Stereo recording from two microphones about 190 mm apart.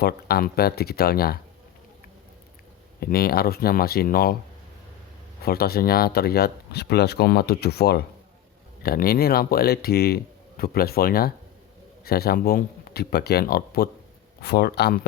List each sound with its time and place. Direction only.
0.0 s speech: 55° left (ahead or behind)
3.0 s speech: 55° left (ahead or behind)
5.4 s speech: 55° left (ahead or behind)